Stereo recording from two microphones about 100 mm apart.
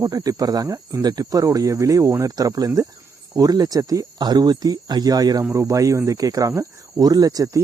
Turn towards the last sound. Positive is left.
turn(degrees=-35)  # may be behind; listen again after turning